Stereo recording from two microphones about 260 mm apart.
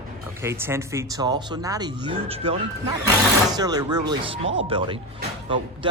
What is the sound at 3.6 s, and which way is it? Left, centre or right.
Speech, centre.